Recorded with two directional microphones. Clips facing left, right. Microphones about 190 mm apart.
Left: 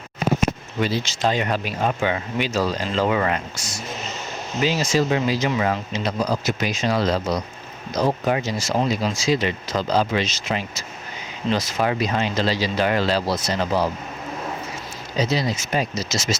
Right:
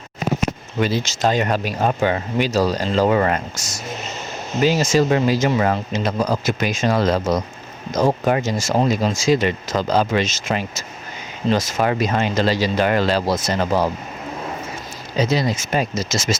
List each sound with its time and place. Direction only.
0.8 s speech: 45° right (ahead or behind)
15.2 s speech: 50° right (ahead or behind)